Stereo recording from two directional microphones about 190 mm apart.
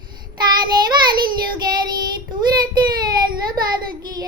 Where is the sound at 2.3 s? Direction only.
20° right (ahead or behind).